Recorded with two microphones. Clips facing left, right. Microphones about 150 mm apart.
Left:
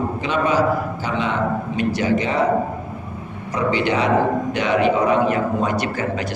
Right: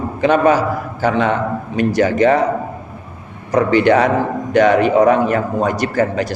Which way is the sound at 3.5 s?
50° right (ahead or behind).